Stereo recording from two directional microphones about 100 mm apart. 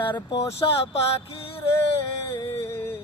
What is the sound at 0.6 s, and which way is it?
Speech, 45° left (ahead or behind).